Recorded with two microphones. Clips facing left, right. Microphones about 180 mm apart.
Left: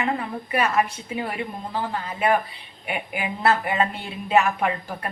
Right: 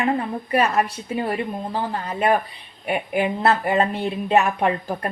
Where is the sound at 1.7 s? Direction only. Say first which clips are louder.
Right 2 dB; 40° right (ahead or behind).